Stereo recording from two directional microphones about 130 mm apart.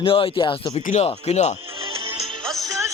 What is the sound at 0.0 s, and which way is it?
Speech, 45° left (ahead or behind).